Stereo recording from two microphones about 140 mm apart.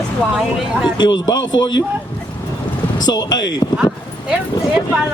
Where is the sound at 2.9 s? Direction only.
30° left (ahead or behind).